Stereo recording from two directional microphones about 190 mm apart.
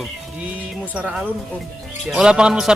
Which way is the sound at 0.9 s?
5° right (ahead or behind).